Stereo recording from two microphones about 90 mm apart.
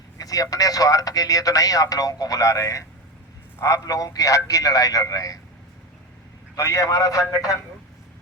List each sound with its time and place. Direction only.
0.2 s speech: 40° left (ahead or behind)
6.6 s speech: 40° left (ahead or behind)